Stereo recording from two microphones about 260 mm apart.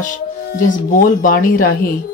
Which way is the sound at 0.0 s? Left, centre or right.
Left.